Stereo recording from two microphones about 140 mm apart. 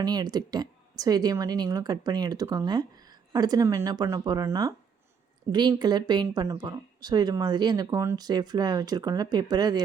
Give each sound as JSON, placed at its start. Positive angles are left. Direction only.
{"t": 0.0, "sound": "a woman's voice", "side_deg": -30}